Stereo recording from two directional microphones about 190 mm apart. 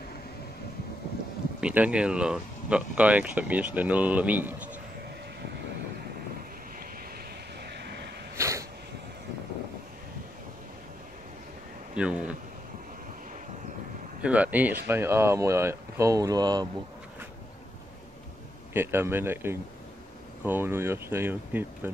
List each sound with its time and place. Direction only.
1.6 s speech: 5° right (ahead or behind)
7.7 s vehicle: 60° right (ahead or behind)
8.4 s a sound: 15° right (ahead or behind)
11.9 s speech: 5° right (ahead or behind)
14.2 s speech: 5° right (ahead or behind)
18.7 s speech: 10° right (ahead or behind)